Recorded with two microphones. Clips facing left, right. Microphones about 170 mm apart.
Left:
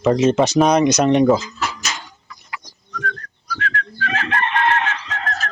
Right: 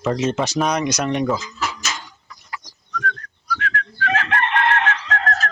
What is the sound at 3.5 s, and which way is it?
Whistling, 30° left (ahead or behind).